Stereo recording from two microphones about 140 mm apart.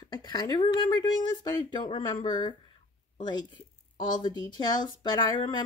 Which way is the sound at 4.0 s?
30° left (ahead or behind).